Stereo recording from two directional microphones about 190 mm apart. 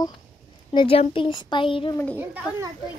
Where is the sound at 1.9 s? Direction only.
10° left (ahead or behind).